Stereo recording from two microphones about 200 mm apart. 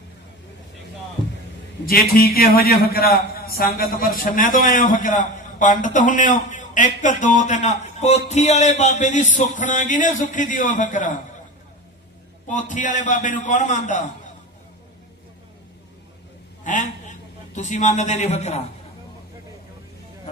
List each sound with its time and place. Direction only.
1.9 s a man's voice: 50° left (ahead or behind)
12.5 s a man's voice: 40° left (ahead or behind)
16.6 s a man's voice: 40° left (ahead or behind)